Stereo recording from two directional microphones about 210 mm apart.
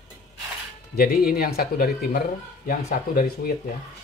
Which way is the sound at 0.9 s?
45° left (ahead or behind).